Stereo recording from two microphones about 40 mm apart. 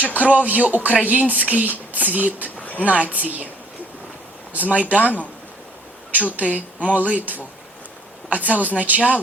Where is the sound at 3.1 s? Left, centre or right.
Right.